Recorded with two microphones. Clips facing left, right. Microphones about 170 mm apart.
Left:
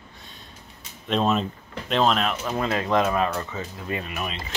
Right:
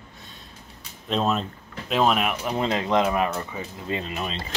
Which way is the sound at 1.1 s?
Centre (ahead or behind).